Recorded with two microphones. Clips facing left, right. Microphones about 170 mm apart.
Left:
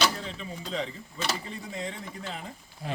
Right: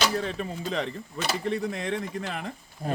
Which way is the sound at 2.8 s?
45° right (ahead or behind).